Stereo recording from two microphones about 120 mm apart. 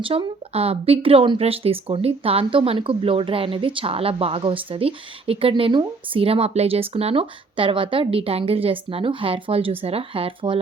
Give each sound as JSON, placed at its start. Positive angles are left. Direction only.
{"t": 0.0, "sound": "speech", "side_deg": -50}